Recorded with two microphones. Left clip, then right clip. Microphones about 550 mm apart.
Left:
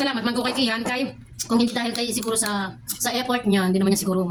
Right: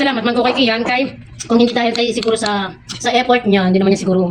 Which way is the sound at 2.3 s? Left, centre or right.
Left.